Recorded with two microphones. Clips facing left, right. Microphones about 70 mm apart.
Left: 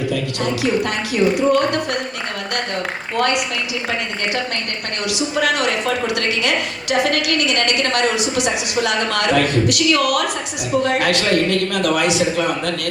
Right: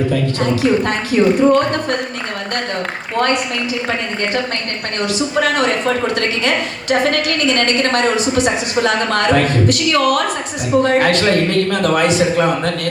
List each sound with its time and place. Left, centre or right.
0.6 s a woman's voice: right
3.2 s a woman's voice: right
5.0 s a woman's voice: right